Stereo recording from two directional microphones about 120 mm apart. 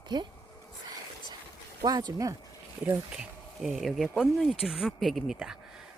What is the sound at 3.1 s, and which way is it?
Speech, centre (ahead or behind).